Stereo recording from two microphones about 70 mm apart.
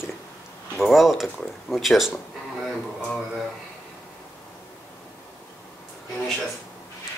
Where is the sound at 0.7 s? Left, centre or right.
Centre.